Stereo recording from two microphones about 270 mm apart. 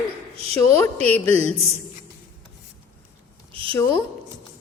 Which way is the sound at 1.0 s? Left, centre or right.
Centre.